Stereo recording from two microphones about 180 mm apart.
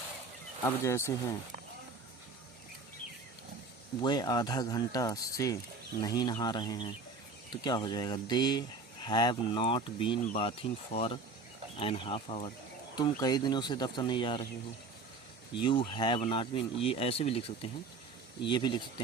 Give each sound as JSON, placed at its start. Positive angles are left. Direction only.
{"t": 0.8, "sound": "speech", "side_deg": 15}
{"t": 4.0, "sound": "speech", "side_deg": 20}
{"t": 15.5, "sound": "speech", "side_deg": 25}